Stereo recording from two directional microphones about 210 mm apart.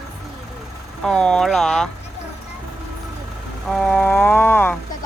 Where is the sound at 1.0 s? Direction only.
5° left (ahead or behind).